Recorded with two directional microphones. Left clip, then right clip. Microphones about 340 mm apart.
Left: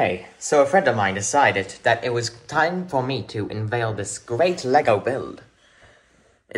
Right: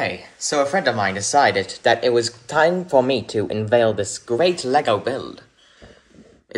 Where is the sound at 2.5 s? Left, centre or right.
Right.